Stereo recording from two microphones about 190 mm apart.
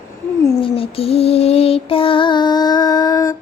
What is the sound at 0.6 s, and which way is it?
Music, 30° left (ahead or behind).